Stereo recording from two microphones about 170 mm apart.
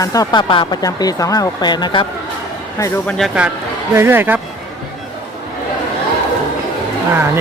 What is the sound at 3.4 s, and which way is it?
Speech, 5° right (ahead or behind).